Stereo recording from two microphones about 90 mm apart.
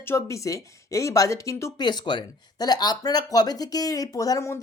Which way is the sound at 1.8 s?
55° left (ahead or behind).